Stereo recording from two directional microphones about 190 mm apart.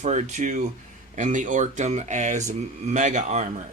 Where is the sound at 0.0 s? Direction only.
40° right (ahead or behind).